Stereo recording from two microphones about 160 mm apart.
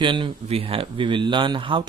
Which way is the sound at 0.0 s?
30° right (ahead or behind).